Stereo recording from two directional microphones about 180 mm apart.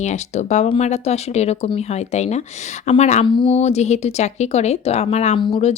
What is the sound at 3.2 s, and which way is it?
Speech, 25° left (ahead or behind).